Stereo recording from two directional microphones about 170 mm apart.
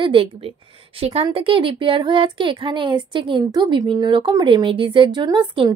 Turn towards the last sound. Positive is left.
turn(degrees=-25)  # may be behind; listen again after turning